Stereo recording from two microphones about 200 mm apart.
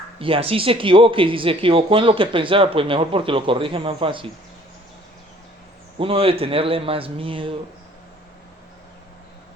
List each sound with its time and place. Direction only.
0.2 s speech: 25° right (ahead or behind)
6.0 s speech: 30° right (ahead or behind)